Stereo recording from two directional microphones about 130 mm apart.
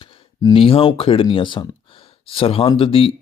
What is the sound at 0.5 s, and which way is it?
Speech, 45° left (ahead or behind).